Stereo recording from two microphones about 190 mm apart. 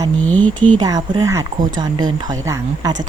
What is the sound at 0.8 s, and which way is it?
Speech, 20° right (ahead or behind).